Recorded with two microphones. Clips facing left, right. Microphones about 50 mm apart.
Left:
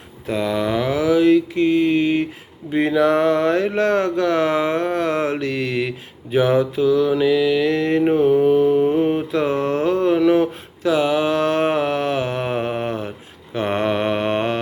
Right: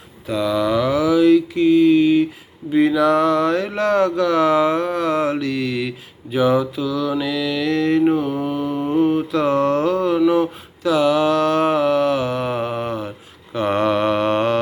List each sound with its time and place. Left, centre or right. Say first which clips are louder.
0.3 s mantra: right 2 dB; left
2.7 s speech: right 1 dB; left
6.3 s mantra: left 1 dB; left
8.1 s speech: left 5 dB; left
8.4 s mantra: left 7 dB; left
10.8 s mantra: right 2 dB; left